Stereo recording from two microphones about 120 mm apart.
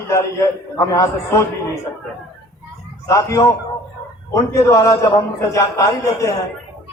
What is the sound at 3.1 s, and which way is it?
A man's voice, 25° left (ahead or behind).